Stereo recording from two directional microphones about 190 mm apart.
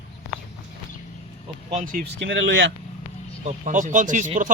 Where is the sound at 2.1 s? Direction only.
70° right (ahead or behind).